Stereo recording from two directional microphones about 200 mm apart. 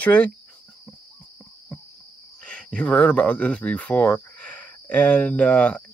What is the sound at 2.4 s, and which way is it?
Speech, 5° left (ahead or behind).